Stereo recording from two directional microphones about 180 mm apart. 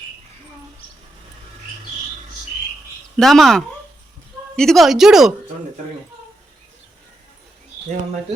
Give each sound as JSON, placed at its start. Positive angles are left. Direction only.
{"t": 3.2, "sound": "speech", "side_deg": 0}